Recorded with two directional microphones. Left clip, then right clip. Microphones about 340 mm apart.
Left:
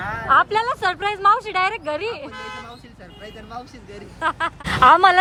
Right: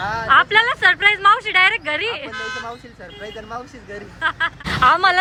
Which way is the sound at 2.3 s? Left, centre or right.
Right.